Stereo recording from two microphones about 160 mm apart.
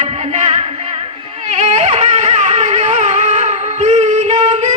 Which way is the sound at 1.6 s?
45° right (ahead or behind).